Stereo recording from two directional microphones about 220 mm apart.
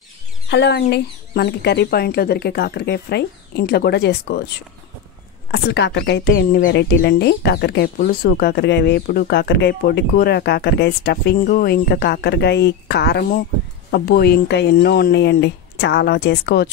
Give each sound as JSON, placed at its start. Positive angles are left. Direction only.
{"t": 0.5, "sound": "speech", "side_deg": 50}